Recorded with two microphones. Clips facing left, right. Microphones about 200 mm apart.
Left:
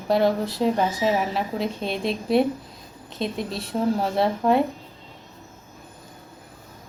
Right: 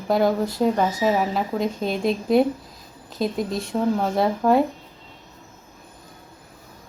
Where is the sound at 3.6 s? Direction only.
Centre (ahead or behind).